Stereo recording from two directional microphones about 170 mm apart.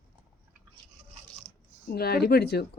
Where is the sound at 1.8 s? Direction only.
65° left (ahead or behind).